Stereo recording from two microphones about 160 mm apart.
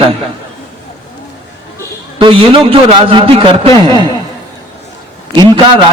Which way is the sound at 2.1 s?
35° right (ahead or behind).